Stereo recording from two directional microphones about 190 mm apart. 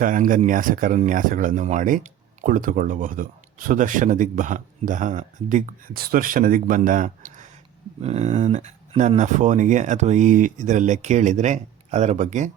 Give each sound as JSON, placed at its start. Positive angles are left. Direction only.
{"t": 0.0, "sound": "speech", "side_deg": -45}